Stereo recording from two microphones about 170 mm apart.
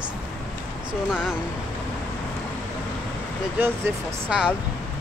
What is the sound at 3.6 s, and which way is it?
Speech, 10° right (ahead or behind).